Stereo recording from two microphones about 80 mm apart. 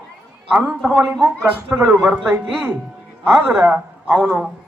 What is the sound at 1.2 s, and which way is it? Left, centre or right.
A man's voice, centre.